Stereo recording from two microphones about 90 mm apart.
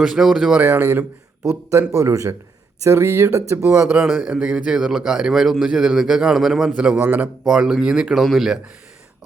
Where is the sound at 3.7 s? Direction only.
10° right (ahead or behind).